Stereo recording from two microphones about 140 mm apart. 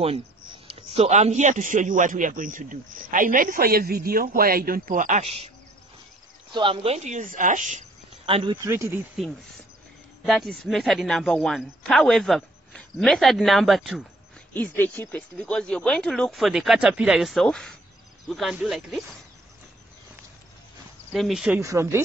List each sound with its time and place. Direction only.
0.7 s a man's voice: 45° right (ahead or behind); by 5.2 s 70° right (ahead or behind)
5.2 s cricket: 45° right (ahead or behind)
6.5 s speech: 40° right (ahead or behind); by 7.8 s 65° right (ahead or behind)
8.3 s cricket: 40° right (ahead or behind)
8.6 s speech: 20° right (ahead or behind)
10.2 s speech: centre (ahead or behind)
14.5 s speech: 15° left (ahead or behind)
21.1 s speech: centre (ahead or behind)
21.5 s speech: 20° right (ahead or behind)